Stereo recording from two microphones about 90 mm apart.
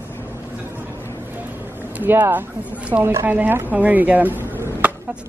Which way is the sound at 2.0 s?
20° right (ahead or behind).